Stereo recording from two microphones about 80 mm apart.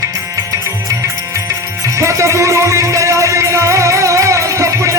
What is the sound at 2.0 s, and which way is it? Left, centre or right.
Music, right.